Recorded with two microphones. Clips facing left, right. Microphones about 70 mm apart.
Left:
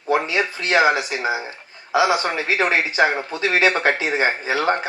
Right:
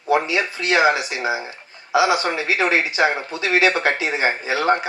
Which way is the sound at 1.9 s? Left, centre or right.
Left.